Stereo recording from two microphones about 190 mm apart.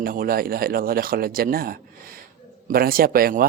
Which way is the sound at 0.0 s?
50° right (ahead or behind).